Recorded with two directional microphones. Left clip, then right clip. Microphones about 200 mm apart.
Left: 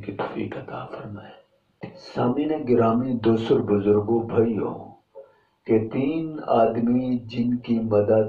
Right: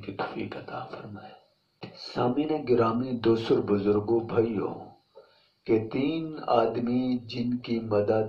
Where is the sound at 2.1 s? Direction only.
25° right (ahead or behind).